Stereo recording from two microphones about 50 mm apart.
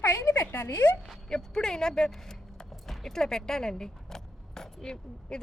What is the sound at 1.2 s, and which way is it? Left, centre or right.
Speech, centre.